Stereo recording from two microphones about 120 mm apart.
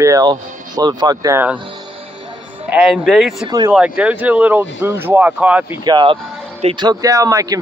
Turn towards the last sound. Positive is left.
turn(degrees=-30)  # may be behind; listen again after turning